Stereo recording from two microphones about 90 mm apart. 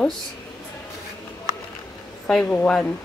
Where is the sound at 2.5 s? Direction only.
15° left (ahead or behind).